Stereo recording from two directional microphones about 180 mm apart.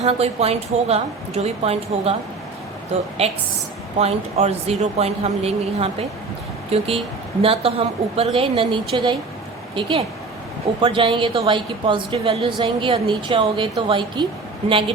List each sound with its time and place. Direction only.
0.0 s a woman's voice: 35° right (ahead or behind)
3.2 s a woman's voice: 35° right (ahead or behind)
10.8 s a woman's voice: 30° right (ahead or behind)